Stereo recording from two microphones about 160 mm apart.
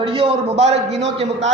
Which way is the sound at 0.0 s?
35° right (ahead or behind).